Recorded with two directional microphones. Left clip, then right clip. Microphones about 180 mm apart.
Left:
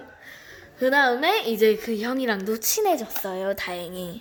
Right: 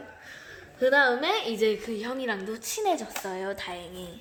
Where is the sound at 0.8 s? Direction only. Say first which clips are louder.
Left 2 dB; 40° left (ahead or behind); by 4.1 s 60° left (ahead or behind).